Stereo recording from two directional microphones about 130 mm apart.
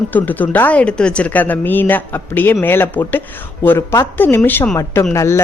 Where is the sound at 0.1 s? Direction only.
15° left (ahead or behind).